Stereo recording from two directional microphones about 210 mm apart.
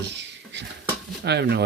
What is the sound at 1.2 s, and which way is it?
Speech, 50° right (ahead or behind).